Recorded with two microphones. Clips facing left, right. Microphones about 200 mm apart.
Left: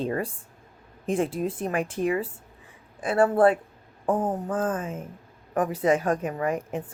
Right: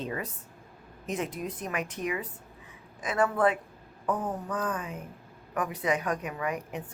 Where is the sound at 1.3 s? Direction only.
30° left (ahead or behind).